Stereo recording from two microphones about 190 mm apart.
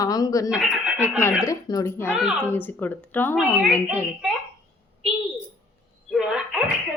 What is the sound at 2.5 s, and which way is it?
Speech, 10° left (ahead or behind).